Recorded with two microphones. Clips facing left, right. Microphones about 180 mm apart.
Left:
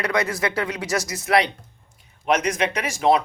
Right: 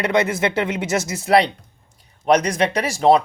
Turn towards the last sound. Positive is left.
turn(degrees=-35)  # may be behind; listen again after turning